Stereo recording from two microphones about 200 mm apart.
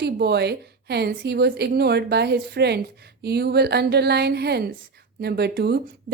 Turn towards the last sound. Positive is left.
turn(degrees=-55)  # may be behind; listen again after turning